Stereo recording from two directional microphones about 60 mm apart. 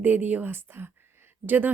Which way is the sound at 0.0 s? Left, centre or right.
Right.